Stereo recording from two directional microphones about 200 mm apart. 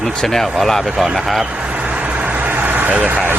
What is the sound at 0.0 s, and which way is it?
Speech, centre (ahead or behind).